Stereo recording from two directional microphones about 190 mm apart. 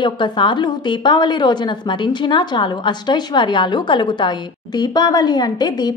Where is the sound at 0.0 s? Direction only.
25° left (ahead or behind).